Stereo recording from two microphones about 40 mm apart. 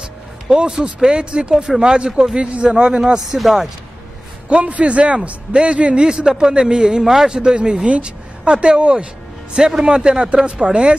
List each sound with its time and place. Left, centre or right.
0.5 s speech: centre
3.0 s speech: centre
4.5 s a man's voice: right
7.0 s speech: centre
7.2 s speech: centre
9.6 s speech: centre